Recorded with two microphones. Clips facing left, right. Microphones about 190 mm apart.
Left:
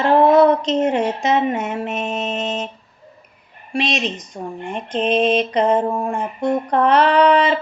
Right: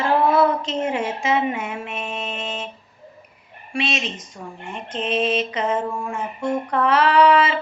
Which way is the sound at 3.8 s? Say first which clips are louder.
Left 4 dB; 40° left (ahead or behind).